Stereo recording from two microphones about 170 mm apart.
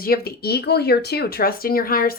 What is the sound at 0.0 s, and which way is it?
Speech, 65° left (ahead or behind).